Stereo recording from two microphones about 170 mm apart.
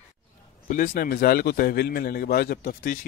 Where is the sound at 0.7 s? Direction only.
55° left (ahead or behind).